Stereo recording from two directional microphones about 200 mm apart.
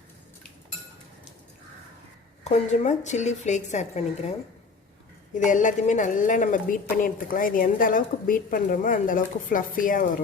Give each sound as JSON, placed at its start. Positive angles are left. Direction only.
{"t": 2.4, "sound": "a woman's voice", "side_deg": 35}
{"t": 5.4, "sound": "a woman's voice", "side_deg": 40}